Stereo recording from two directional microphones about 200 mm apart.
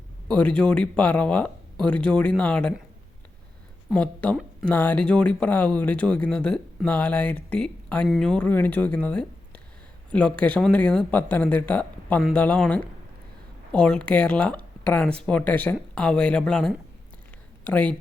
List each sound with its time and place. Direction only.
0.3 s speech: 5° left (ahead or behind)
3.9 s speech: 5° left (ahead or behind)